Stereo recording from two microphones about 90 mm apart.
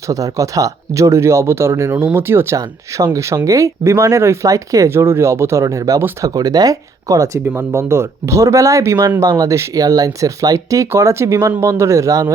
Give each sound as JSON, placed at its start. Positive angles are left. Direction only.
{"t": 0.1, "sound": "speech", "side_deg": -40}
{"t": 2.6, "sound": "speech", "side_deg": -40}